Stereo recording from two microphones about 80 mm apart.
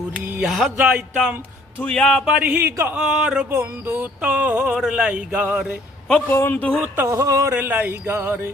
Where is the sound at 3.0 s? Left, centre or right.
Centre.